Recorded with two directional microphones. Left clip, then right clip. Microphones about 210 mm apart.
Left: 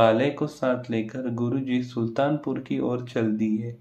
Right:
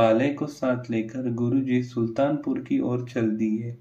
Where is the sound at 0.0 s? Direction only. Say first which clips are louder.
Left 1 dB; 5° left (ahead or behind).